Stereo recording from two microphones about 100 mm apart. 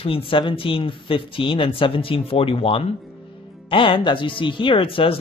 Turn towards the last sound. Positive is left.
turn(degrees=65)  # may be behind; listen again after turning